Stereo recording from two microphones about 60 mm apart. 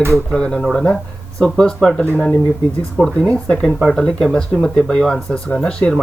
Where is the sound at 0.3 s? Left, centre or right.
Centre.